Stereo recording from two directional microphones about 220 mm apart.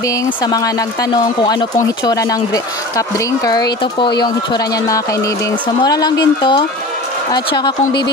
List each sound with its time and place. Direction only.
0.4 s speech: 15° left (ahead or behind)